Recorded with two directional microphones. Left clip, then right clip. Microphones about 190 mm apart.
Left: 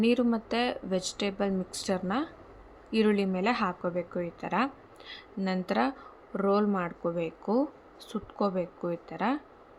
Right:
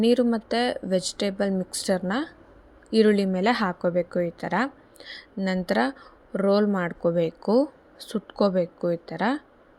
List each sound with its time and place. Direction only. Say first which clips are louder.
0.0 s a woman's voice: right 5 dB; 25° right (ahead or behind)